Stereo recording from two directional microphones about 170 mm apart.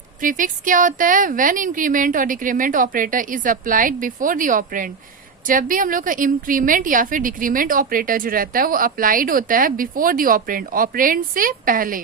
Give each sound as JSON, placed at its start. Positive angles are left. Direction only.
{"t": 0.2, "sound": "a woman's voice", "side_deg": -50}